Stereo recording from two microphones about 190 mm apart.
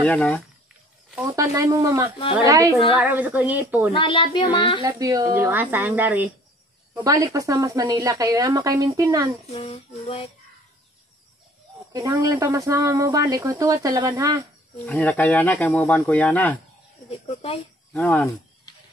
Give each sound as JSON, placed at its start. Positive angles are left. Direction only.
{"t": 0.0, "sound": "speech", "side_deg": 5}
{"t": 1.2, "sound": "speech", "side_deg": -15}
{"t": 3.9, "sound": "speech", "side_deg": 25}
{"t": 4.8, "sound": "speech", "side_deg": -20}
{"t": 9.5, "sound": "female singing", "side_deg": 35}
{"t": 11.9, "sound": "speech", "side_deg": -20}
{"t": 14.9, "sound": "speech", "side_deg": 10}
{"t": 17.4, "sound": "female singing", "side_deg": 30}
{"t": 17.9, "sound": "speech", "side_deg": 10}